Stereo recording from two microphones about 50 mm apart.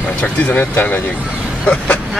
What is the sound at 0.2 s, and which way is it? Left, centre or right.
Speech, left.